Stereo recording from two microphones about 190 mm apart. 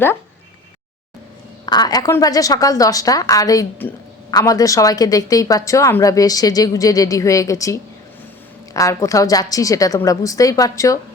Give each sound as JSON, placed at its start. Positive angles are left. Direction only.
{"t": 1.6, "sound": "a woman's voice", "side_deg": 20}